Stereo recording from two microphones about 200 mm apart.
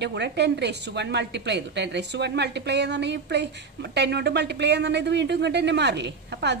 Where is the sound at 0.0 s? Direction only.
60° right (ahead or behind).